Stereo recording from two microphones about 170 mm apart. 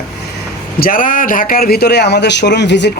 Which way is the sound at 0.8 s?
55° left (ahead or behind).